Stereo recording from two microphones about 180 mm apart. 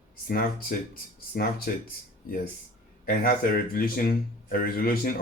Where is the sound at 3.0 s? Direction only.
55° left (ahead or behind).